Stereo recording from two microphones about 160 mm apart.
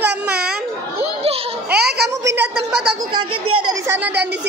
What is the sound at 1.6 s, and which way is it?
Speech, 85° right.